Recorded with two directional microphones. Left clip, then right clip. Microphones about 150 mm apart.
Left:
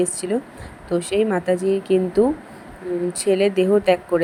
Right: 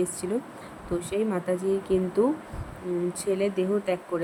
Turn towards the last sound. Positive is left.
turn(degrees=30)  # may be behind; listen again after turning